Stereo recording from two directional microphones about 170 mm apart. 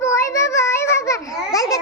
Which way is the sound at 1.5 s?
20° left (ahead or behind).